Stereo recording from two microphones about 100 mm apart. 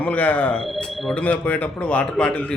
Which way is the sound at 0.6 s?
5° left (ahead or behind).